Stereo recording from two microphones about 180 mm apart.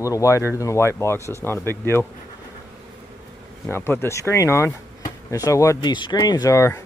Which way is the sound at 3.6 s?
15° left (ahead or behind).